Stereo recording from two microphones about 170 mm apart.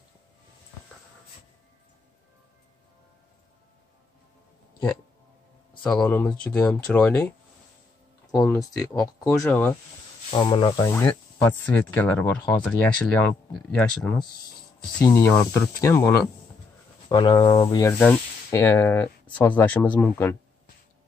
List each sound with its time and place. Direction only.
6.0 s speech: 5° left (ahead or behind)
8.4 s speech: 20° left (ahead or behind)
10.3 s speech: 30° left (ahead or behind); by 14.2 s 5° left (ahead or behind)
15.0 s speech: 20° left (ahead or behind)
17.1 s speech: 30° left (ahead or behind)
17.8 s speech: 10° left (ahead or behind)